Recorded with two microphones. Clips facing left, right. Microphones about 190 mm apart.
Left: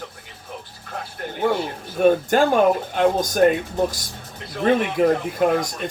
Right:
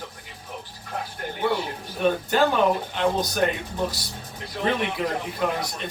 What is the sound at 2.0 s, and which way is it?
Speech, 45° left (ahead or behind).